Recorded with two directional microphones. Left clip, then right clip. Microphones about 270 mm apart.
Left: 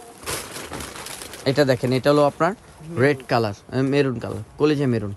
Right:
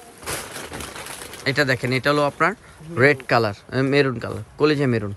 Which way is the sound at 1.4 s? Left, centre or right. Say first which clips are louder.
Left 1 dB; centre.